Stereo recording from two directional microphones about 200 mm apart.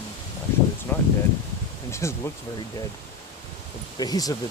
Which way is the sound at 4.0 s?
20° left (ahead or behind).